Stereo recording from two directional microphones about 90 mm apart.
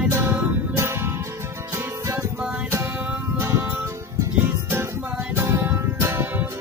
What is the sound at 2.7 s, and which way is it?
Music, 25° right (ahead or behind).